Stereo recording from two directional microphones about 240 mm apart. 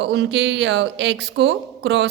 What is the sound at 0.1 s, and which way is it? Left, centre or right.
A woman's voice, right.